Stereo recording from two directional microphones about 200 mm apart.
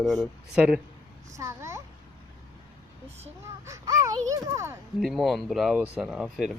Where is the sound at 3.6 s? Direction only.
15° right (ahead or behind).